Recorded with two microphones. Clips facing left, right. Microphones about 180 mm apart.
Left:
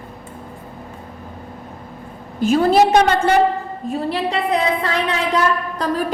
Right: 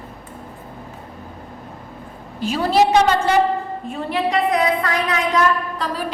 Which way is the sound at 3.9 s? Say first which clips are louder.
Even; 35° left (ahead or behind).